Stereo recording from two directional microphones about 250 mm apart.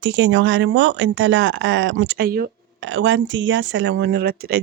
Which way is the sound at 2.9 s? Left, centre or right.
Right.